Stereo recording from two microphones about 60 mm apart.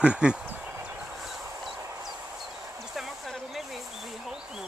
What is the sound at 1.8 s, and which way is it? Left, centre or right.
Vehicle, right.